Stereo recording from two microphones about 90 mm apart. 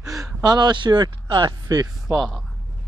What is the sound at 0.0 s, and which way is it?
Speech, 35° right (ahead or behind).